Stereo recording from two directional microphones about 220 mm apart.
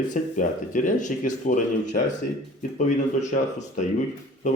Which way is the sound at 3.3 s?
35° left (ahead or behind).